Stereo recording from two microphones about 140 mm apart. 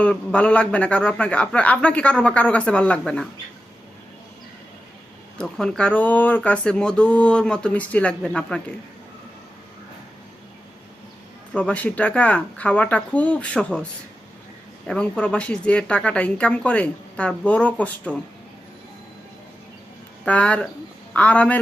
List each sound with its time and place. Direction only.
0.0 s speech: 10° left (ahead or behind)
5.4 s speech: 5° left (ahead or behind)
11.5 s speech: 10° left (ahead or behind)
14.8 s speech: 5° left (ahead or behind)
20.2 s a man's voice: 10° left (ahead or behind)